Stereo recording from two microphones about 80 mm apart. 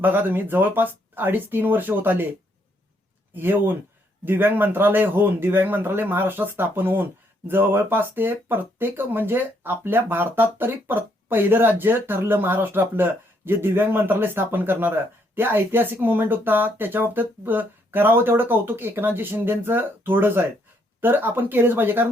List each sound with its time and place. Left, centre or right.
0.0 s speech: right
3.3 s speech: right